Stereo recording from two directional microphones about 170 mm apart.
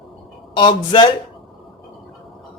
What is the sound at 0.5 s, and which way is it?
Speech, 30° left (ahead or behind).